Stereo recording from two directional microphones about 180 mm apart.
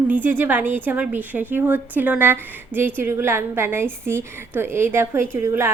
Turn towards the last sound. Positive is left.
turn(degrees=-15)  # may be behind; listen again after turning